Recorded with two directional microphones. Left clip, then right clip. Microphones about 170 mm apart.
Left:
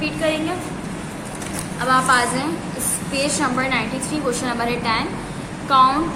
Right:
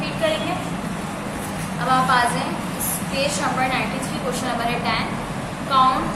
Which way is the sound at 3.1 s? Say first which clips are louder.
Left 1 dB; 40° left (ahead or behind).